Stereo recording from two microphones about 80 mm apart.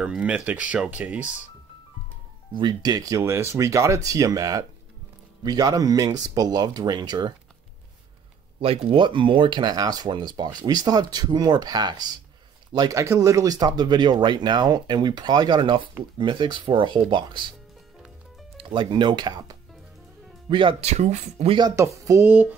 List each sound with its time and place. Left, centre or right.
0.0 s speech: centre
2.8 s speech: right
8.5 s speech: right
12.9 s speech: right
13.6 s speech: right
18.6 s speech: right
20.4 s speech: right
21.7 s speech: right
22.2 s a sound: right